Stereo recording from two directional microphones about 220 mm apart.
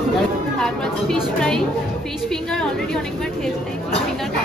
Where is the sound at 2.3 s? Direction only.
5° left (ahead or behind).